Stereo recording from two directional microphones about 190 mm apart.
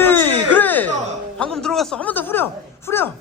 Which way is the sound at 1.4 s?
5° left (ahead or behind).